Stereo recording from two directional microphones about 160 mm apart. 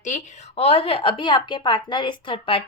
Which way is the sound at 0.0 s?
45° left (ahead or behind).